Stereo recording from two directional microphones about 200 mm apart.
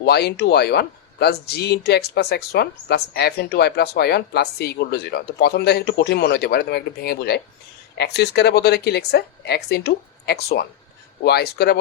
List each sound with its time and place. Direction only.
0.0 s speech: 55° left (ahead or behind)